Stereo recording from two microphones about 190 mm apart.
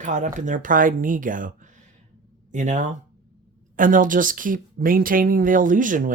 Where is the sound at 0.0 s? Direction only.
40° right (ahead or behind).